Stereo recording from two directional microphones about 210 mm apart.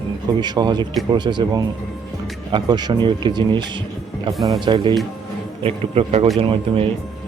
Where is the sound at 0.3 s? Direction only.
20° right (ahead or behind).